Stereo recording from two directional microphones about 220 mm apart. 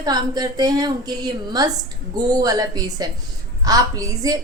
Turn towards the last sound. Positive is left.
turn(degrees=-15)  # may be behind; listen again after turning